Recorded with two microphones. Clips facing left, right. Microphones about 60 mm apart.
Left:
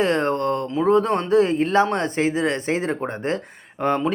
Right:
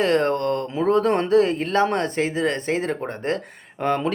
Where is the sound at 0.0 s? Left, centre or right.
Centre.